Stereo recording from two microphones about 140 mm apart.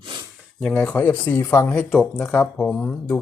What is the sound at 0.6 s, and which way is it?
Speech, 10° left (ahead or behind).